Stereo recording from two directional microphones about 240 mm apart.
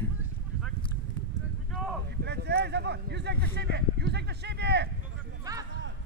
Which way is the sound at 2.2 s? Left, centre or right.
Right.